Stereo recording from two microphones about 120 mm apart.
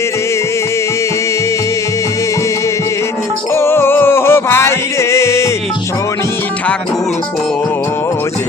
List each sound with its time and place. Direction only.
3.5 s music: 20° left (ahead or behind)